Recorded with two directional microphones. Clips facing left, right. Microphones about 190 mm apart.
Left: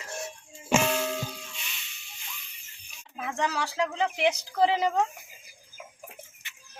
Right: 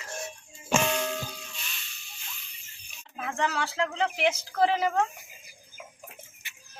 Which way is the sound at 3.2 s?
5° left (ahead or behind).